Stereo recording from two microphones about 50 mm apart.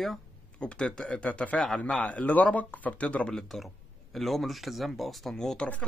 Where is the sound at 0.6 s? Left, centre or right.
Left.